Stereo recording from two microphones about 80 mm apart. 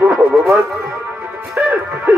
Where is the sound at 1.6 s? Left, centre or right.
Right.